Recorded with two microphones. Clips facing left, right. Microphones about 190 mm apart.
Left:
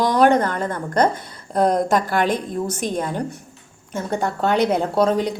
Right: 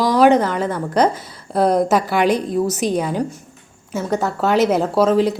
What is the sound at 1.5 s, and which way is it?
A woman's voice, 5° right (ahead or behind).